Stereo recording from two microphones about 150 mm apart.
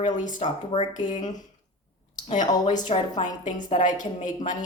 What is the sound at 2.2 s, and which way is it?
Speech, 55° left (ahead or behind).